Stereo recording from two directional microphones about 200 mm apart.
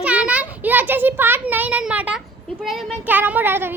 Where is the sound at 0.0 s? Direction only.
5° right (ahead or behind).